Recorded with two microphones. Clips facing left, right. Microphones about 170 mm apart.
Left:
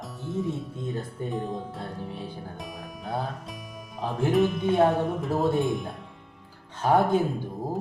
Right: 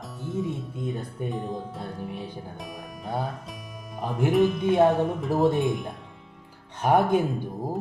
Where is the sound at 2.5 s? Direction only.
Centre (ahead or behind).